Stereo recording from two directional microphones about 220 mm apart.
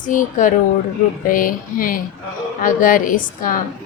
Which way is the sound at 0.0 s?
35° left (ahead or behind).